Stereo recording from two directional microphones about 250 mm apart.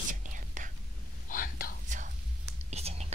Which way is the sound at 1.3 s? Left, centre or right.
Left.